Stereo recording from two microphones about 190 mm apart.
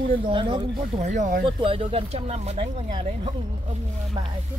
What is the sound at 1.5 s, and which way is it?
Speech, 25° right (ahead or behind).